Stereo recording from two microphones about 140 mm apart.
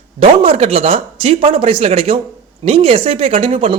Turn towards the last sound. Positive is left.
turn(degrees=-40)  # may be behind; listen again after turning